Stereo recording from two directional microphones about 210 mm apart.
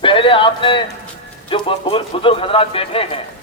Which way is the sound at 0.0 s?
25° left (ahead or behind).